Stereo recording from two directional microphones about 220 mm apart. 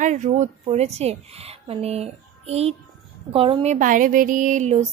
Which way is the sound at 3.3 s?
25° right (ahead or behind).